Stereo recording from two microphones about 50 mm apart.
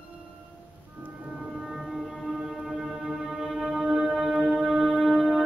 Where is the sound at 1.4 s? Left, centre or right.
Centre.